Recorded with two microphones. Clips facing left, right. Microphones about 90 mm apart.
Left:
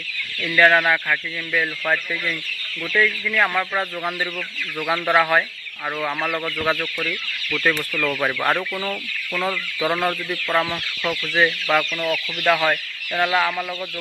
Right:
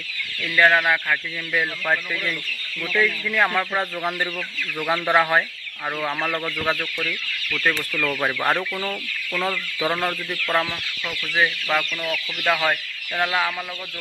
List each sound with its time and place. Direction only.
0.4 s speech: centre (ahead or behind)
2.9 s speech: 15° right (ahead or behind); by 6.7 s 5° left (ahead or behind)
8.2 s speech: 10° right (ahead or behind)
8.5 s speech: 5° left (ahead or behind)